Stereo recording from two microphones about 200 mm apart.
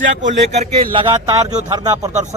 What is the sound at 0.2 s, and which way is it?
A man's voice, 35° right (ahead or behind).